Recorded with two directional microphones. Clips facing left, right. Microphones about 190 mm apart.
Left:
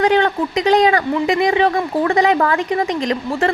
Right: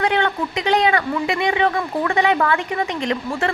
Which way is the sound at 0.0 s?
35° left (ahead or behind).